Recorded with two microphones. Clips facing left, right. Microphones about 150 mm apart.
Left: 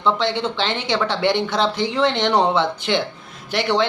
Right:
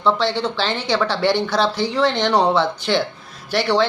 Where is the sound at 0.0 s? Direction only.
20° left (ahead or behind).